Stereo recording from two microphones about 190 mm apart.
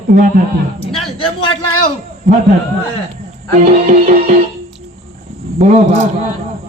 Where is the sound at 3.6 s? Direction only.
35° right (ahead or behind).